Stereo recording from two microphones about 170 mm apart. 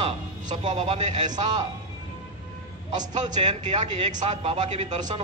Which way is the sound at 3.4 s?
40° right (ahead or behind).